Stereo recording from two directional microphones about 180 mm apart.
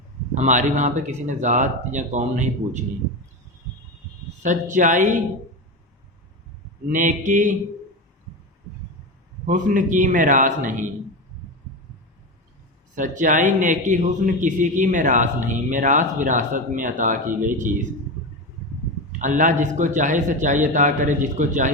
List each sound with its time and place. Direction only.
0.3 s speech: 40° right (ahead or behind)
4.4 s a man's voice: 45° right (ahead or behind)
6.9 s a man's voice: 45° right (ahead or behind)
9.5 s a man's voice: 45° right (ahead or behind)
12.9 s a man's voice: 45° right (ahead or behind)
19.2 s a man's voice: 45° right (ahead or behind)